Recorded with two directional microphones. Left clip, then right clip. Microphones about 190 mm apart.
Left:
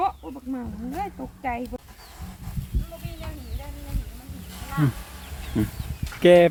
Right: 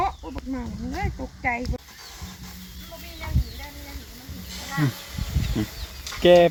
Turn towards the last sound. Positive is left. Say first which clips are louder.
# even
turn(degrees=10)  # may be behind; listen again after turning